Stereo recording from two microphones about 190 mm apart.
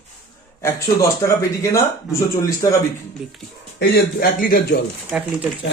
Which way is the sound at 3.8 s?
55° left (ahead or behind).